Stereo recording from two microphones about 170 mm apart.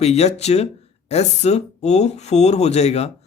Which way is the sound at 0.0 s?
40° left (ahead or behind).